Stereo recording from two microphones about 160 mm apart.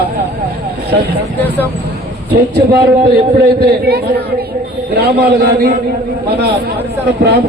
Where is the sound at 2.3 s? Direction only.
85° right.